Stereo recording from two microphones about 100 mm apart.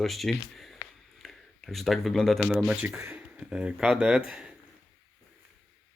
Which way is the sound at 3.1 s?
10° right (ahead or behind).